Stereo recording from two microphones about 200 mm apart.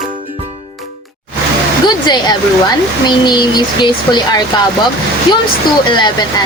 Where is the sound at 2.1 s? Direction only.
20° left (ahead or behind).